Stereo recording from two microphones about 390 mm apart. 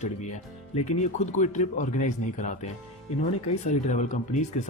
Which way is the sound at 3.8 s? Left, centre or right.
Centre.